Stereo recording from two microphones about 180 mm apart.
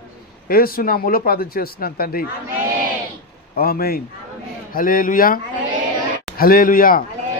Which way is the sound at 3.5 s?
55° left (ahead or behind).